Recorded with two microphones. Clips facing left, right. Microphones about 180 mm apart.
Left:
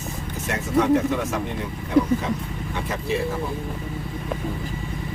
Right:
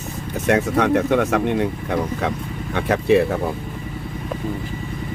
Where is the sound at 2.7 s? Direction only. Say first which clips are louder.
Right 10 dB; 65° right (ahead or behind).